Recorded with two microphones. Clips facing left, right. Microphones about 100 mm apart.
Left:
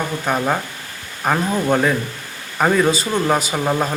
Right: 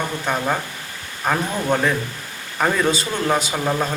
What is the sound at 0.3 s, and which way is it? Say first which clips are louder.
Speech: left 3 dB; 5° left (ahead or behind).